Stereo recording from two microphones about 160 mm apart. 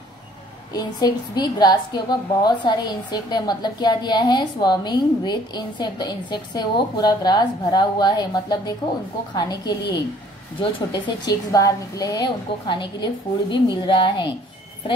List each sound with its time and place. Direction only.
0.7 s a woman's voice: 25° left (ahead or behind)